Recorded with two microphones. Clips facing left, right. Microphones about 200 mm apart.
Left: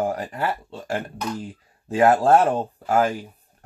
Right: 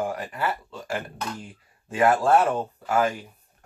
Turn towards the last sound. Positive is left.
turn(degrees=35)  # may be behind; listen again after turning